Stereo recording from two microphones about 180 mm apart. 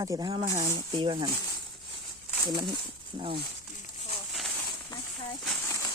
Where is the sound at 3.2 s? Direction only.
30° right (ahead or behind).